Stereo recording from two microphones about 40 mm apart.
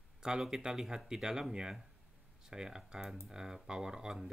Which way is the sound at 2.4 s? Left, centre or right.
Centre.